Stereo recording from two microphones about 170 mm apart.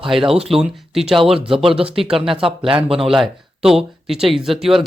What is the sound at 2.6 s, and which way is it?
Speech, 30° right (ahead or behind).